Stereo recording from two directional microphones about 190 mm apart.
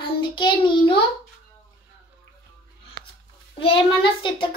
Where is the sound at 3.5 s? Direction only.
25° left (ahead or behind).